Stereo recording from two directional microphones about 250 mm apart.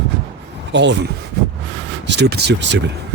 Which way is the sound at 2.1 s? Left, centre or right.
Right.